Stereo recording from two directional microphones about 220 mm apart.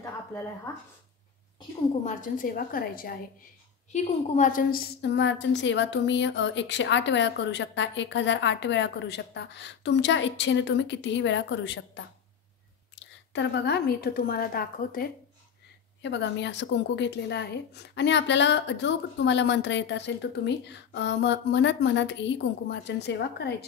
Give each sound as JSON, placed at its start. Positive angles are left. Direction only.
{"t": 2.0, "sound": "a woman's voice", "side_deg": 40}
{"t": 13.3, "sound": "a woman's voice", "side_deg": 50}
{"t": 16.0, "sound": "a woman's voice", "side_deg": 55}